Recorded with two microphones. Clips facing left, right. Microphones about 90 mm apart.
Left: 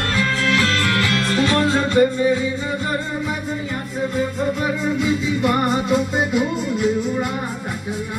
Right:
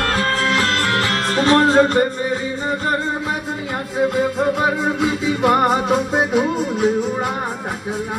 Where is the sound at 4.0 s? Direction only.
75° right (ahead or behind); by 6.4 s 50° right (ahead or behind).